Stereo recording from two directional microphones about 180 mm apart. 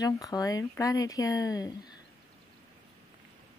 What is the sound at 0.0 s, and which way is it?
Speech, 20° left (ahead or behind).